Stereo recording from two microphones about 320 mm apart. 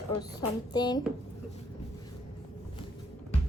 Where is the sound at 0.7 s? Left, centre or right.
Centre.